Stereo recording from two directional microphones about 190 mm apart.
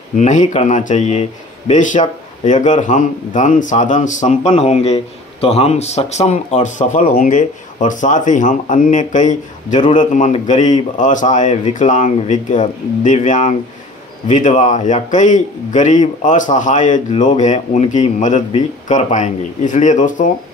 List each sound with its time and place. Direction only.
0.1 s speech: 40° left (ahead or behind)